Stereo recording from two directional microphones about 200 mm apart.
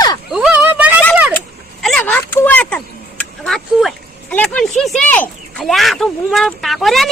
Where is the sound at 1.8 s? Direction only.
5° left (ahead or behind).